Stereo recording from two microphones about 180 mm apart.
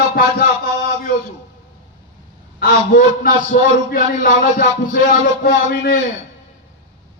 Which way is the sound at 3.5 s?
50° left (ahead or behind).